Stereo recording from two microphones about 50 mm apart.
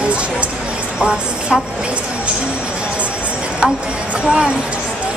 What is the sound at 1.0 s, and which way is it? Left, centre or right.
Speech, right.